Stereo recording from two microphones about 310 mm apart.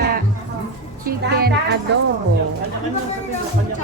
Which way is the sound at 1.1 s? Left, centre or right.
Right.